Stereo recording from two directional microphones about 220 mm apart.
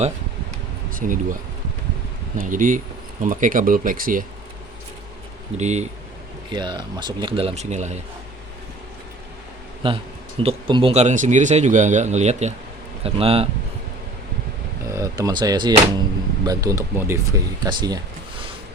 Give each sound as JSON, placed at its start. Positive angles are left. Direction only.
{"t": 0.9, "sound": "speech", "side_deg": -35}
{"t": 2.4, "sound": "speech", "side_deg": -35}
{"t": 5.5, "sound": "speech", "side_deg": -30}
{"t": 6.5, "sound": "speech", "side_deg": -20}
{"t": 9.8, "sound": "speech", "side_deg": -25}
{"t": 14.9, "sound": "speech", "side_deg": -15}